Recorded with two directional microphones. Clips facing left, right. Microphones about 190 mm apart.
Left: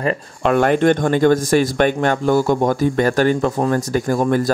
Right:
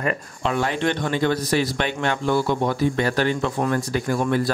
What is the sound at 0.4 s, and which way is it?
Speech, 55° left (ahead or behind).